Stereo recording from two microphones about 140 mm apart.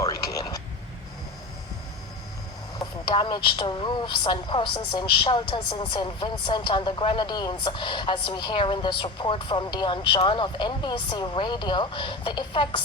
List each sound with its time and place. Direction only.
0.0 s vehicle: 25° left (ahead or behind)
2.7 s a woman's voice: 35° left (ahead or behind)